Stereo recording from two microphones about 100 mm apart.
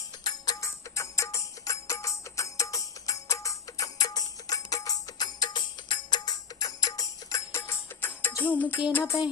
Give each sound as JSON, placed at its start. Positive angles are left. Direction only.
{"t": 0.3, "sound": "music", "side_deg": 35}